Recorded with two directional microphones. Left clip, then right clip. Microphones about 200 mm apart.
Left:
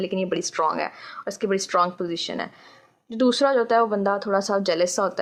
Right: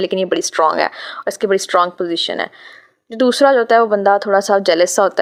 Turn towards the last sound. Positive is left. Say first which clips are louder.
# right 9 dB
turn(degrees=-40)  # may be behind; listen again after turning